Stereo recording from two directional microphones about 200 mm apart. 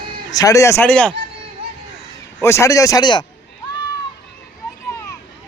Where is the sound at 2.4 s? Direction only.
15° left (ahead or behind).